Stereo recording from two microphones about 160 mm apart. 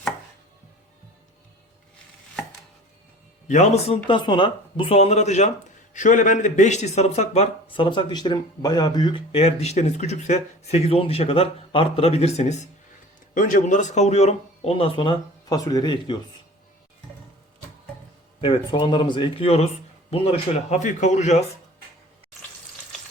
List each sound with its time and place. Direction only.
3.5 s speech: 45° left (ahead or behind)
4.0 s speech: 30° left (ahead or behind)
18.3 s speech: 30° left (ahead or behind); by 21.4 s 45° left (ahead or behind)